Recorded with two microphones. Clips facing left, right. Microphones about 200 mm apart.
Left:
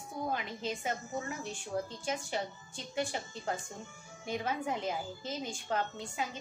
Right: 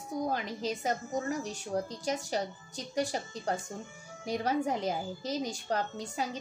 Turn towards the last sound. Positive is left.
turn(degrees=-40)  # may be behind; listen again after turning